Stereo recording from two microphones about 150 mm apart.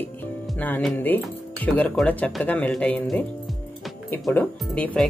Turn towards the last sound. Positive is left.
turn(degrees=10)  # may be behind; listen again after turning